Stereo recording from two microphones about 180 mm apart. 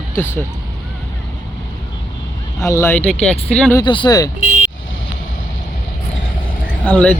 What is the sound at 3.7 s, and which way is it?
Speech, 25° left (ahead or behind).